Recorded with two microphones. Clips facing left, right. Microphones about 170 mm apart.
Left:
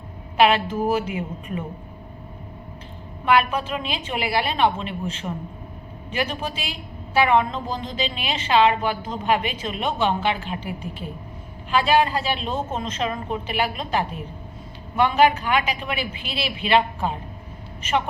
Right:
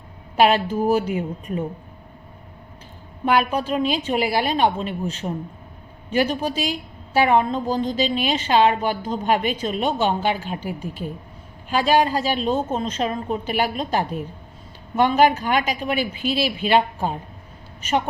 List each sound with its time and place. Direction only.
0.3 s a woman's voice: 40° right (ahead or behind)
3.2 s a woman's voice: 40° right (ahead or behind)